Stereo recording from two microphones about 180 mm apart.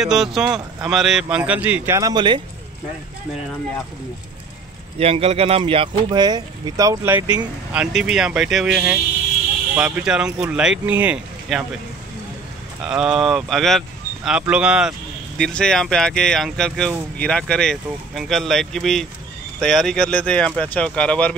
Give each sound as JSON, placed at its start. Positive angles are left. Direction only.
{"t": 0.0, "sound": "speech", "side_deg": 0}
{"t": 4.9, "sound": "speech", "side_deg": -35}
{"t": 12.8, "sound": "speech", "side_deg": -5}